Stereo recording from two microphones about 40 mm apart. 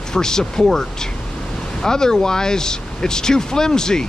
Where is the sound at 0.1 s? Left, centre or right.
Centre.